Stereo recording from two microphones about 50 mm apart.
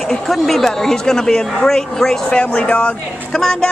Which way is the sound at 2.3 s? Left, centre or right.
Left.